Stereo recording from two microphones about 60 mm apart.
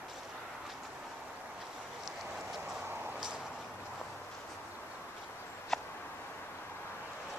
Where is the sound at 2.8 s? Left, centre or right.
Right.